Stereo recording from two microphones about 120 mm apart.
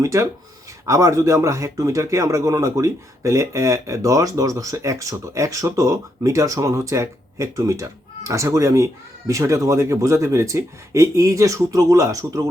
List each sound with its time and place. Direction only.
0.0 s speech: 25° right (ahead or behind)